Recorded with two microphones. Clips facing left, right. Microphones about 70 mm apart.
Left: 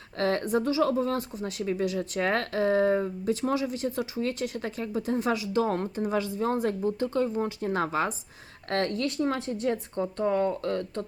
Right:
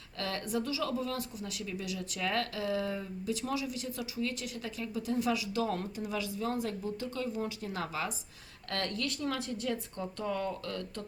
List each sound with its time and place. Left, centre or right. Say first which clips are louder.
0.2 s speech: left 9 dB; left